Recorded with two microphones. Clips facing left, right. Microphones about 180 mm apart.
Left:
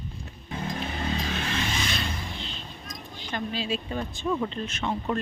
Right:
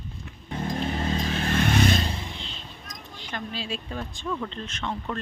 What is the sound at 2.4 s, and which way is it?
Basketball bounce, centre (ahead or behind).